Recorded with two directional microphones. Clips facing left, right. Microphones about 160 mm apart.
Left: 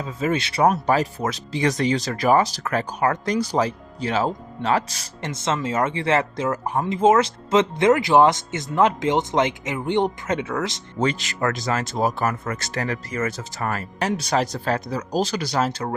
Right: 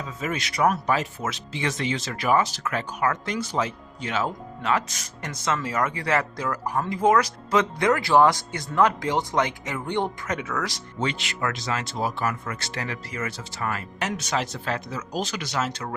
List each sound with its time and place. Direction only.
0.0 s speech: 30° left (ahead or behind)
11.0 s speech: 40° left (ahead or behind)